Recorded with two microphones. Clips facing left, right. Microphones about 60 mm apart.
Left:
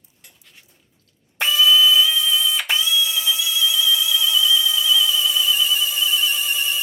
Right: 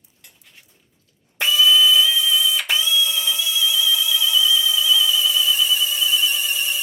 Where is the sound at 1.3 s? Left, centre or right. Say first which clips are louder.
Even; centre.